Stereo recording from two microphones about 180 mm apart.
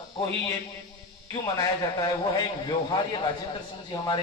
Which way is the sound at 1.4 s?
20° left (ahead or behind).